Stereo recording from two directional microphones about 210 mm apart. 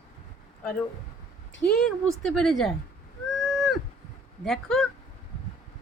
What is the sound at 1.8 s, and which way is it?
Speech, centre (ahead or behind).